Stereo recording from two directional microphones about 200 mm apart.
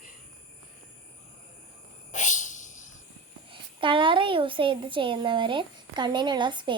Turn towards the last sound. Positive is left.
turn(degrees=-20)  # may be behind; listen again after turning